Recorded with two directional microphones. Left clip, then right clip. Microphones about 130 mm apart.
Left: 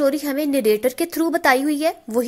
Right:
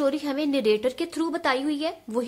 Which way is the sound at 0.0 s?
40° left (ahead or behind).